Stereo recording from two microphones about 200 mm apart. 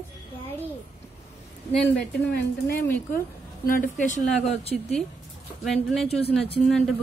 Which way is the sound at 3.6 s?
40° left (ahead or behind).